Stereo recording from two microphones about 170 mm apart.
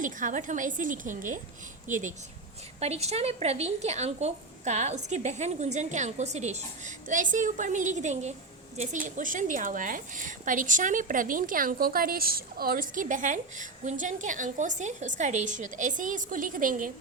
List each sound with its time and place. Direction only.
0.0 s a woman's voice: 50° right (ahead or behind)